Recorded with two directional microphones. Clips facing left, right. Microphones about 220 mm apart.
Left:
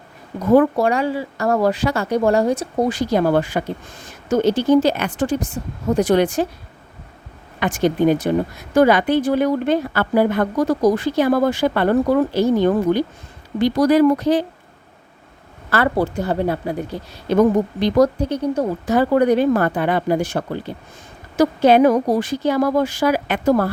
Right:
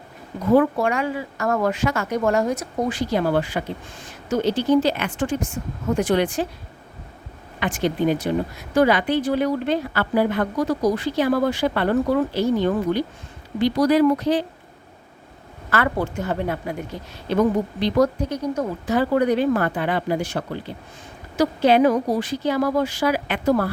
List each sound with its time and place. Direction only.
0.5 s speech: 40° left (ahead or behind)
7.6 s speech: 45° left (ahead or behind)
15.7 s speech: 35° left (ahead or behind)
17.7 s speech: 45° left (ahead or behind)
18.9 s speech: 45° left (ahead or behind)